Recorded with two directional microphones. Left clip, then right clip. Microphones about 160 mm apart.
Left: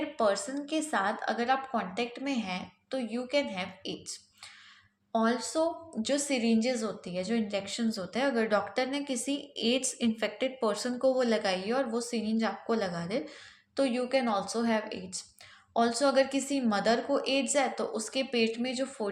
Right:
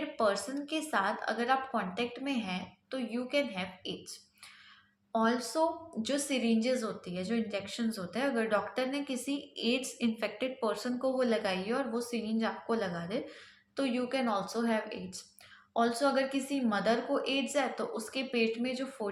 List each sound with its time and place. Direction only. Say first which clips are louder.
0.2 s a woman's voice: left 2 dB; 20° left (ahead or behind)